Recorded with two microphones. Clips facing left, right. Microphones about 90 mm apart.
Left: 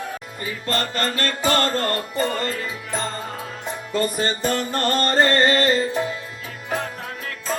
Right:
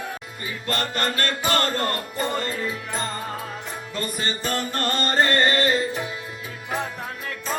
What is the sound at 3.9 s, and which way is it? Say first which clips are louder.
Music: left 6 dB; 35° left (ahead or behind).